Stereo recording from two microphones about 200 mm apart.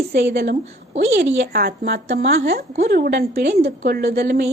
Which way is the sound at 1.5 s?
50° right (ahead or behind).